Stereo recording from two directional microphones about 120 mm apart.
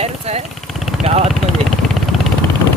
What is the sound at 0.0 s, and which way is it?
Vehicle, 60° right (ahead or behind).